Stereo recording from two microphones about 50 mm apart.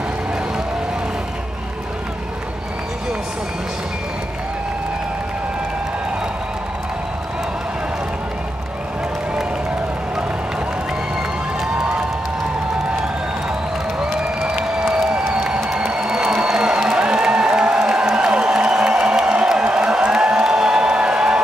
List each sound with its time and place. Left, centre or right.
14.4 s applause: centre
15.8 s music: centre